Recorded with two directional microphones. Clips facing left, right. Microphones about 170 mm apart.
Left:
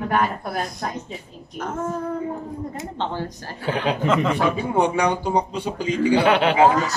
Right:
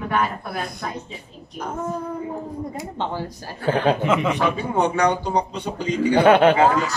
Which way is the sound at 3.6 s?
45° right (ahead or behind).